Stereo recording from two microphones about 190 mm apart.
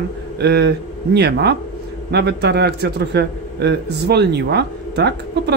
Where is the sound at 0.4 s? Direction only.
60° right (ahead or behind).